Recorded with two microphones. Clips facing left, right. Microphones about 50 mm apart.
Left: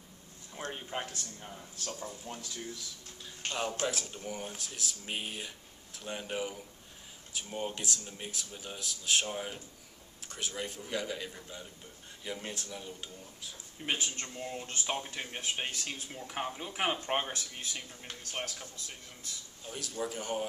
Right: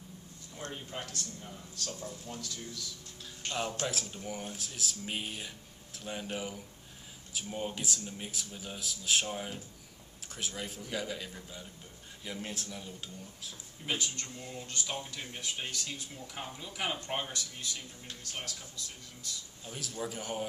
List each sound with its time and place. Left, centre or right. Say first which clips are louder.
0.6 s speech: left 3 dB; left
3.8 s speech: left 1 dB; centre
13.8 s speech: left 1 dB; left
19.6 s speech: left 2 dB; centre